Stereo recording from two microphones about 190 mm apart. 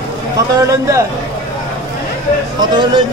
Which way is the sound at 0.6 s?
15° right (ahead or behind).